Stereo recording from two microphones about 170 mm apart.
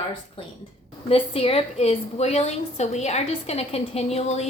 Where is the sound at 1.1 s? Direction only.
35° left (ahead or behind).